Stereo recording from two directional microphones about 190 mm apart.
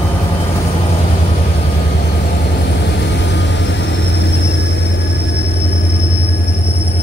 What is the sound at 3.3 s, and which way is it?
Vehicle, 65° left (ahead or behind).